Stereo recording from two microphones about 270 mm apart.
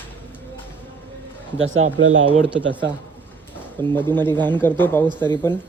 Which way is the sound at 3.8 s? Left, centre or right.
Centre.